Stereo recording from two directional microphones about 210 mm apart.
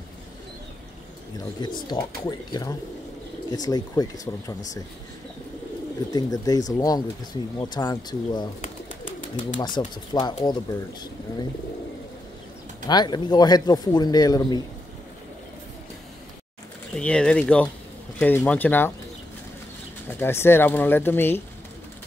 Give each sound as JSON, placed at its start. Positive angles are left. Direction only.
{"t": 1.6, "sound": "speech", "side_deg": 20}
{"t": 6.1, "sound": "speech", "side_deg": 15}
{"t": 9.6, "sound": "speech", "side_deg": 20}
{"t": 12.8, "sound": "speech", "side_deg": 20}
{"t": 16.9, "sound": "speech", "side_deg": 5}
{"t": 20.1, "sound": "speech", "side_deg": 10}